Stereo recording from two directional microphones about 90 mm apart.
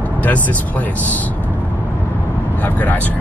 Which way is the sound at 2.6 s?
20° left (ahead or behind).